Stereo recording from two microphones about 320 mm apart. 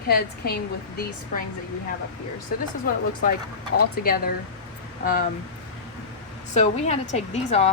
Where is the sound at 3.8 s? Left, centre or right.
Left.